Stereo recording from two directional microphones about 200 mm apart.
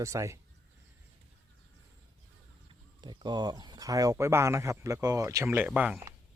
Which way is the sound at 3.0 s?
25° right (ahead or behind).